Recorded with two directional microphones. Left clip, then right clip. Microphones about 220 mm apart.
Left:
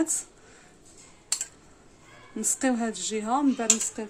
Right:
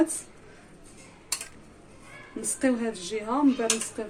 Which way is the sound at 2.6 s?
50° left (ahead or behind).